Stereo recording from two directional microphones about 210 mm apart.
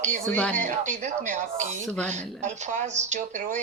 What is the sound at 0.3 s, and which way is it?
Speech, 5° left (ahead or behind).